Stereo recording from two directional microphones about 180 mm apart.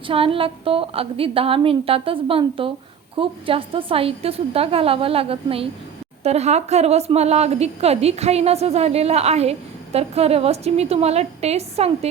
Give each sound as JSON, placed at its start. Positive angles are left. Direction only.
{"t": 0.1, "sound": "a woman's voice", "side_deg": -30}